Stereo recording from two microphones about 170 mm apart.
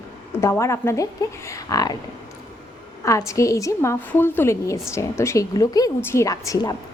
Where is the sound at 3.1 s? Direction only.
20° left (ahead or behind).